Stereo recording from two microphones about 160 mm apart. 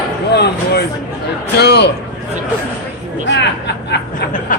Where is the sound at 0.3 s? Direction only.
90° left.